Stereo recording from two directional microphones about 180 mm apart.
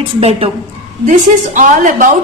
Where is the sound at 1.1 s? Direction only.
45° right (ahead or behind).